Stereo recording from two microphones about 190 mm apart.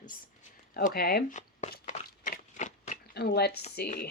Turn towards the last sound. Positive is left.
turn(degrees=50)  # may be behind; listen again after turning